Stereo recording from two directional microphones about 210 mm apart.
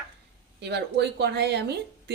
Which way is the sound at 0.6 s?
55° right (ahead or behind).